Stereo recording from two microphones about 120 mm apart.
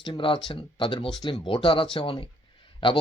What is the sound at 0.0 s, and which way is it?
A man's voice, 40° left (ahead or behind).